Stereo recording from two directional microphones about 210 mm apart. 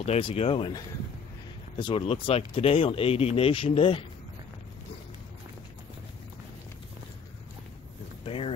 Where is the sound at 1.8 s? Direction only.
25° left (ahead or behind).